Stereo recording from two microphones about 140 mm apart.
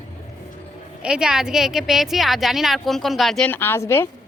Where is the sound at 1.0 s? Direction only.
5° right (ahead or behind).